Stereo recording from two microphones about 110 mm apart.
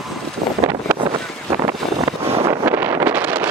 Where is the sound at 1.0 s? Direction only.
50° right (ahead or behind).